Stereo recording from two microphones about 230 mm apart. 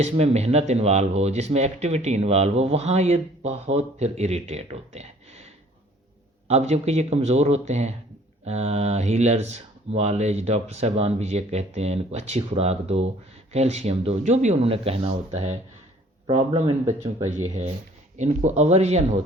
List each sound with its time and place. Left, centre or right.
0.0 s speech: right
6.5 s speech: right; by 17.2 s centre
18.2 s speech: right